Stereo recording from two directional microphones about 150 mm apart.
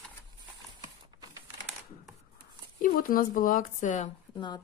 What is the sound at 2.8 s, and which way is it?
Speech, 65° left (ahead or behind).